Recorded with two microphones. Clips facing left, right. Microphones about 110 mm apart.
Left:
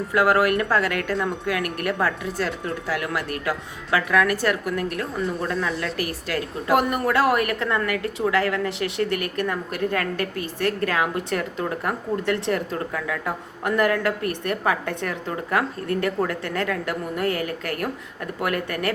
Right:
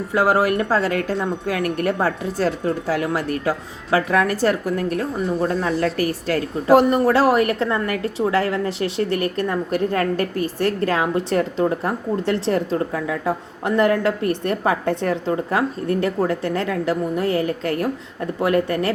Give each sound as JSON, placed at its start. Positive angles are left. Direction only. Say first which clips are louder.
{"t": 0.1, "sound": "a woman's voice", "louder": "right 1 dB", "side_deg": -30}